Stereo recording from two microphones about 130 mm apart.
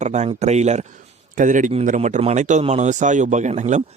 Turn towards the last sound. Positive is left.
turn(degrees=-65)  # may be behind; listen again after turning